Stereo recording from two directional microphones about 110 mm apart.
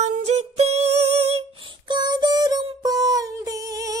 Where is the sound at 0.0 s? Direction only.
80° right.